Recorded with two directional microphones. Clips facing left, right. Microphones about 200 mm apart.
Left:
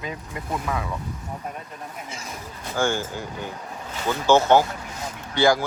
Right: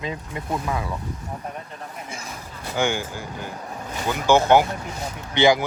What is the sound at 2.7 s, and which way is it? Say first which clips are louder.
Speech: even; 15° right (ahead or behind).